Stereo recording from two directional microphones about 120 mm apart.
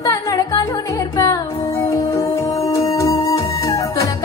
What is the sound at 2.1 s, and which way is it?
Music, 25° left (ahead or behind).